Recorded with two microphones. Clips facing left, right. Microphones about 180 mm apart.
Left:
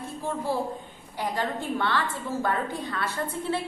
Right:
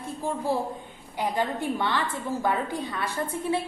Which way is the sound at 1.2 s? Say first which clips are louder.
Right 2 dB; 15° right (ahead or behind).